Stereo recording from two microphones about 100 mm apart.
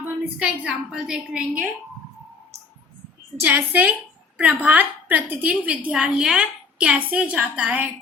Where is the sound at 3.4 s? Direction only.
15° right (ahead or behind).